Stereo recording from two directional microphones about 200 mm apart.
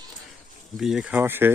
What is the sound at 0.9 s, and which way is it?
Speech, 5° right (ahead or behind).